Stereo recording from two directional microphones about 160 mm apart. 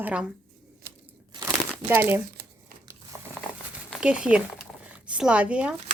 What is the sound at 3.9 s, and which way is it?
Speech, 5° right (ahead or behind).